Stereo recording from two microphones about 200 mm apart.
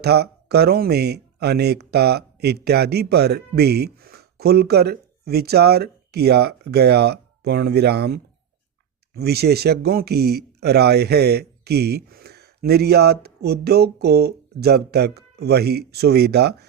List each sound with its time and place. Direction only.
0.0 s speech: 55° right (ahead or behind)